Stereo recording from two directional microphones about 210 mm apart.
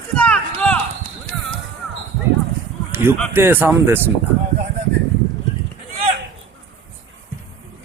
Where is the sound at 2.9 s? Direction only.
10° right (ahead or behind).